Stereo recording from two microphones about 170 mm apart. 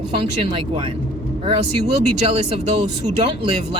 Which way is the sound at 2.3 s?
35° right (ahead or behind).